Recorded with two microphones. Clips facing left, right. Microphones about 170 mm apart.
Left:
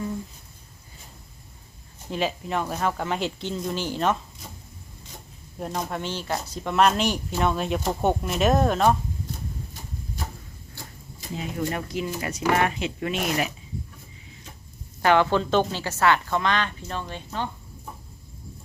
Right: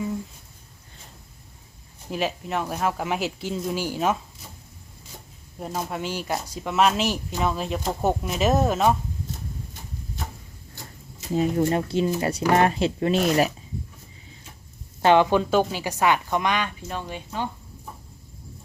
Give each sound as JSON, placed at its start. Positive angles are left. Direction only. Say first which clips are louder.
{"t": 2.0, "sound": "a woman's voice", "louder": "even", "side_deg": 0}
{"t": 5.5, "sound": "speech", "louder": "even", "side_deg": -5}
{"t": 11.6, "sound": "speech", "louder": "right 6 dB", "side_deg": -30}
{"t": 15.0, "sound": "a woman's voice", "louder": "right 2 dB", "side_deg": -20}